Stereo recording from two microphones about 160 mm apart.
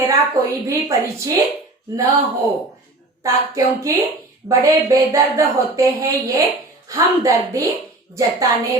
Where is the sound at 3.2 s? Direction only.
20° right (ahead or behind).